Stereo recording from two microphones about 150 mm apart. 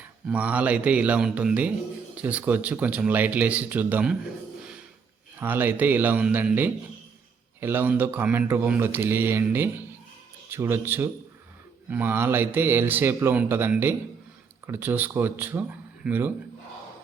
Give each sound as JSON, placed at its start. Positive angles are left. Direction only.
{"t": 0.0, "sound": "speech", "side_deg": -10}
{"t": 5.4, "sound": "speech", "side_deg": -15}